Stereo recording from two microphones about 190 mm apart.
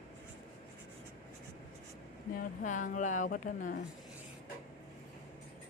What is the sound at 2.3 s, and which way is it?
Speech, 40° left (ahead or behind).